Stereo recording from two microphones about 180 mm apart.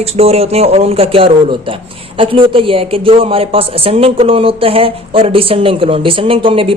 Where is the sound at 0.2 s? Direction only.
35° right (ahead or behind).